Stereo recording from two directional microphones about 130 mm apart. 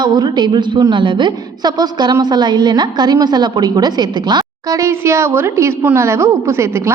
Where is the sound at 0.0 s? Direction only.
35° right (ahead or behind).